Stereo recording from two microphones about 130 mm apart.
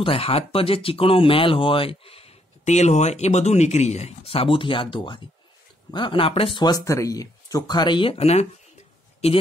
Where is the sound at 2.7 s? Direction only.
60° left (ahead or behind).